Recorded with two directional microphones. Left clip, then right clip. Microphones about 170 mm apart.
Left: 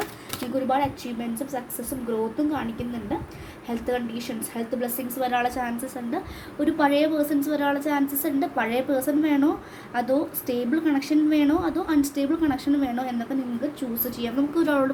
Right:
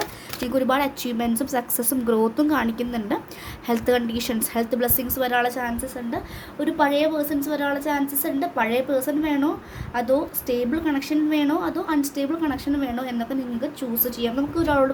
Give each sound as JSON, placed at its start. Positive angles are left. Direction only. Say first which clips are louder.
{"t": 0.5, "sound": "a woman's voice", "louder": "right 2 dB", "side_deg": -50}